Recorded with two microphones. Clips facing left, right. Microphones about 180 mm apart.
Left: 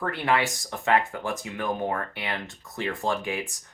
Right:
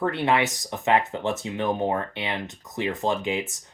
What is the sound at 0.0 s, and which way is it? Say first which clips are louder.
Speech: right 3 dB; 25° right (ahead or behind).